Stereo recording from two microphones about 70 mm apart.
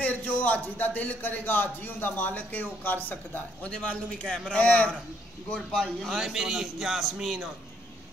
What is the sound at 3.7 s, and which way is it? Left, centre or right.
Speech, centre.